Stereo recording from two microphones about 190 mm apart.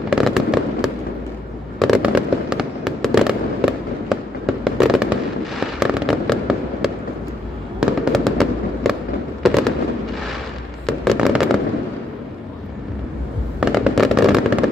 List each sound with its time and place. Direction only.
0.1 s fireworks: centre (ahead or behind)
10.9 s fireworks: centre (ahead or behind)
13.6 s fireworks: centre (ahead or behind)